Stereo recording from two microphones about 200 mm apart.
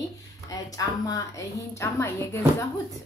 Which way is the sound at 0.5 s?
15° left (ahead or behind).